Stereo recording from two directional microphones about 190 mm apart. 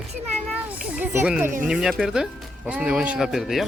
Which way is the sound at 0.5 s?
10° right (ahead or behind).